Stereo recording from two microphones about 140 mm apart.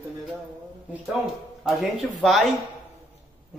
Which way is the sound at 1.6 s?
Centre (ahead or behind).